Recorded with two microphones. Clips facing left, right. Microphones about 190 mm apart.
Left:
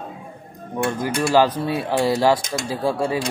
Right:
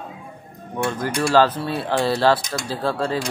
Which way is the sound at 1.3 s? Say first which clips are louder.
Even; 10° left (ahead or behind).